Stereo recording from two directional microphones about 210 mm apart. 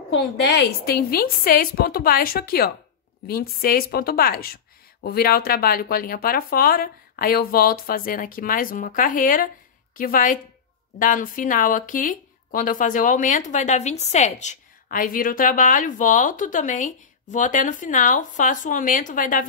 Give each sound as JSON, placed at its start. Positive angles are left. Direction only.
{"t": 0.1, "sound": "speech", "side_deg": 55}